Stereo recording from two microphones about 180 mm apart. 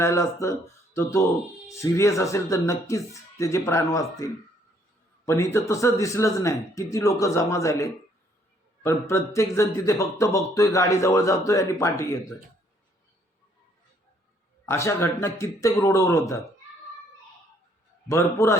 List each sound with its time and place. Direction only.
0.0 s speech: 15° left (ahead or behind)
14.7 s speech: 15° left (ahead or behind)
18.1 s speech: 15° left (ahead or behind)